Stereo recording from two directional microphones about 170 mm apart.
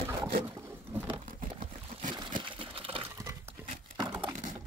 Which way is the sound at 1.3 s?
55° right (ahead or behind).